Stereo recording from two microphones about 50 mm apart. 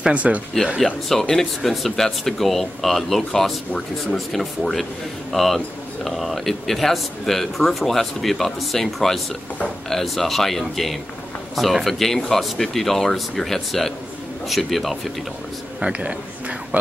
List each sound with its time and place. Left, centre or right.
0.1 s speech: right
1.0 s speech: centre
15.8 s a man's voice: right